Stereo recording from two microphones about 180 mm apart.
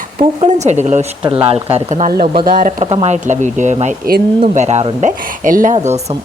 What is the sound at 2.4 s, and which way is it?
Speech, 50° right (ahead or behind).